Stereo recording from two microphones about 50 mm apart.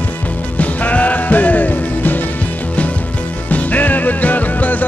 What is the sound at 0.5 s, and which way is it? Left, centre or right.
Music, left.